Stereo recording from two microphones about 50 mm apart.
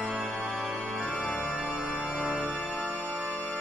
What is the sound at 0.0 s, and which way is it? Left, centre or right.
Music, centre.